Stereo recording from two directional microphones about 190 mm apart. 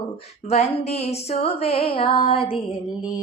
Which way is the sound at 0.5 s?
35° left (ahead or behind).